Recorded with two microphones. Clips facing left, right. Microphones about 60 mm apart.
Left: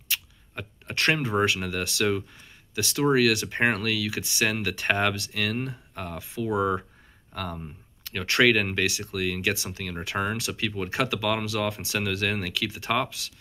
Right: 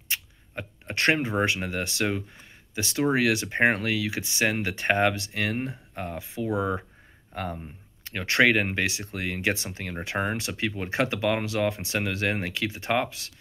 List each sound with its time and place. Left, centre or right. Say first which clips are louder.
0.1 s a sound: even; right
1.4 s speech: left 1 dB; right
8.0 s speech: even; right